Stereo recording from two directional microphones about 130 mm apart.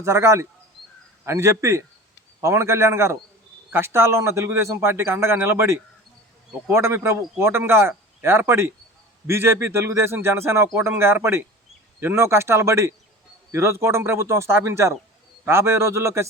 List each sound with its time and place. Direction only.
0.0 s speech: 20° right (ahead or behind)